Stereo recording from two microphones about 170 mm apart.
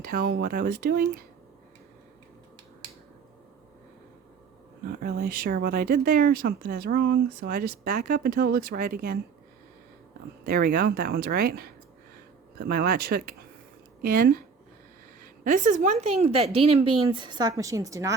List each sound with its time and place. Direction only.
0.0 s speech: 60° right (ahead or behind)
4.9 s speech: 60° right (ahead or behind)
10.4 s speech: 65° right (ahead or behind)
15.4 s speech: 45° right (ahead or behind); by 18.1 s 20° right (ahead or behind)